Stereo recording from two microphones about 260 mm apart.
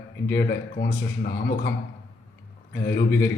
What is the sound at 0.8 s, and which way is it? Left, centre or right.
Speech, left.